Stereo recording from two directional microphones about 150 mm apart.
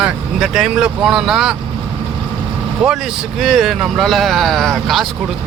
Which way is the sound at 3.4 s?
Centre (ahead or behind).